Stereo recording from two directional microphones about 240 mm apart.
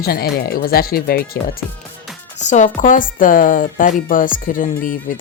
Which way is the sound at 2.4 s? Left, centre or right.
Left.